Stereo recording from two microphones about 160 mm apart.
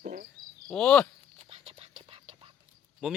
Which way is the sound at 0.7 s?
5° left (ahead or behind).